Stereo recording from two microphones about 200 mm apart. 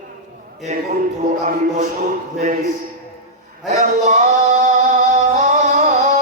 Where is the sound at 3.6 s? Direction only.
35° right (ahead or behind).